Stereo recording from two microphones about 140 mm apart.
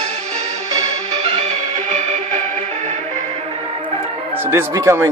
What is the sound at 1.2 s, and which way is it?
Music, 50° right (ahead or behind).